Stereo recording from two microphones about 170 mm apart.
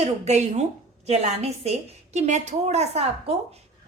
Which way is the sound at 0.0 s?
40° right (ahead or behind).